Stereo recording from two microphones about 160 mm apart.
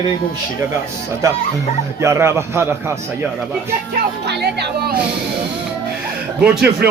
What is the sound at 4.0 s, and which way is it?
Speech, 90° right.